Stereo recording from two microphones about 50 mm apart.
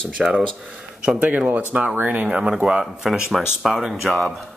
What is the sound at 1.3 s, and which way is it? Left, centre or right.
Speech, right.